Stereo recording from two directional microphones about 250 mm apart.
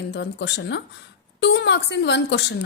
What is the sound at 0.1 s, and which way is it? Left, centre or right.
Speech, left.